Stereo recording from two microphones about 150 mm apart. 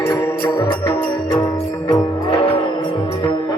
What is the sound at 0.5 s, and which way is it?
Music, 25° left (ahead or behind).